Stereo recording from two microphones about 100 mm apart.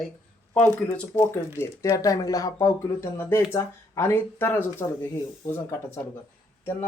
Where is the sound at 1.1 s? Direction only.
20° left (ahead or behind).